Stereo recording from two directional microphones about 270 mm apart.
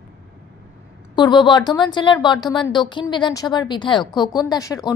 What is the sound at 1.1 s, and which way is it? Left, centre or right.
Speech, centre.